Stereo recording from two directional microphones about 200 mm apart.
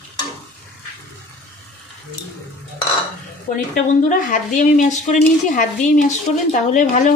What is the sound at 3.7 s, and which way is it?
Speech, 40° left (ahead or behind).